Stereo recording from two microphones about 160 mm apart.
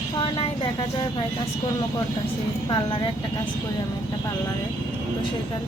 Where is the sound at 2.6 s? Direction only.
30° left (ahead or behind).